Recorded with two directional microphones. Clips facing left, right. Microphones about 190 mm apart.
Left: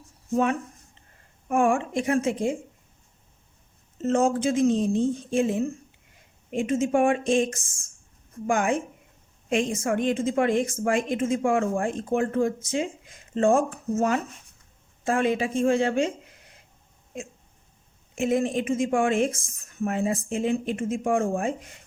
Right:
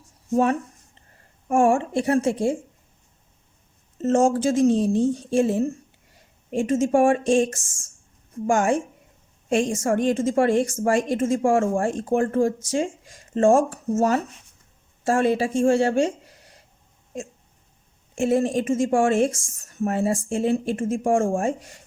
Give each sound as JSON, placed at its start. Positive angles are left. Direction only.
{"t": 1.5, "sound": "a woman's voice", "side_deg": -45}
{"t": 1.7, "sound": "speech", "side_deg": -35}
{"t": 4.0, "sound": "speech", "side_deg": -45}
{"t": 8.4, "sound": "speech", "side_deg": -45}
{"t": 18.2, "sound": "speech", "side_deg": -40}